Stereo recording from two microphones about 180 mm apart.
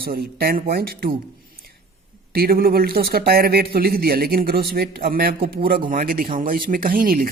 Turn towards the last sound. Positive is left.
turn(degrees=-55)  # may be behind; listen again after turning